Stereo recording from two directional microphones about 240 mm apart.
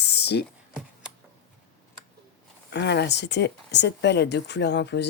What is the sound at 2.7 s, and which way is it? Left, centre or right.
Speech, left.